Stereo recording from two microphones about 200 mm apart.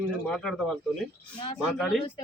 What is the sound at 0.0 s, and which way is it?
Speech, centre (ahead or behind).